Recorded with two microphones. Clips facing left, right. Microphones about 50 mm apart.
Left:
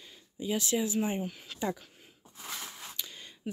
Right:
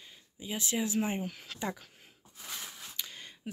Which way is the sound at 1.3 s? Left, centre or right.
Right.